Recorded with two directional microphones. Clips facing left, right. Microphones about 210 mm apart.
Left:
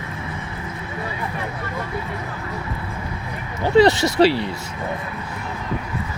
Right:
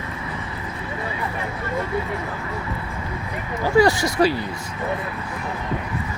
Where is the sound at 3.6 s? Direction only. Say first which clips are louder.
Left 3 dB; 25° left (ahead or behind).